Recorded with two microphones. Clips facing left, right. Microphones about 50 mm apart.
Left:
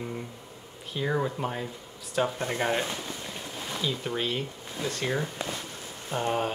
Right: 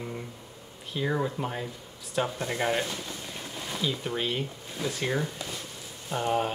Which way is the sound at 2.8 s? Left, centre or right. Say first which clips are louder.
Left 1 dB; centre.